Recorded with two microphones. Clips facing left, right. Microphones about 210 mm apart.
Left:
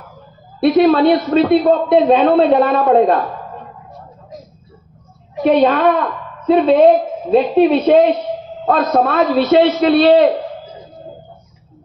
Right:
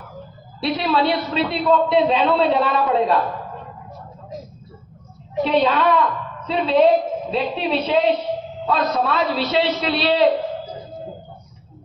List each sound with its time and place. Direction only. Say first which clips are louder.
0.6 s a woman's voice: left 10 dB; 50° left (ahead or behind)
5.4 s a woman's voice: left 6 dB; 50° left (ahead or behind)